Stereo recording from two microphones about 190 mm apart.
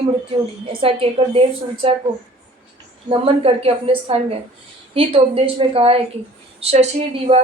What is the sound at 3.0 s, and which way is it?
A woman's voice, 30° right (ahead or behind).